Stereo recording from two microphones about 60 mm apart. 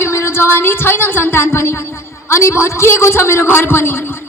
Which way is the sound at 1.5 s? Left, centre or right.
Left.